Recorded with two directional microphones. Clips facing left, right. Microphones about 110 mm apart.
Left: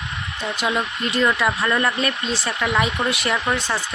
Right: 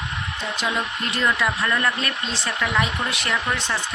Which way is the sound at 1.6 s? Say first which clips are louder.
Left 3 dB; 15° left (ahead or behind).